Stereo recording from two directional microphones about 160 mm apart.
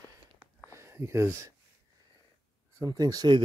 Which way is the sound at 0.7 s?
15° right (ahead or behind).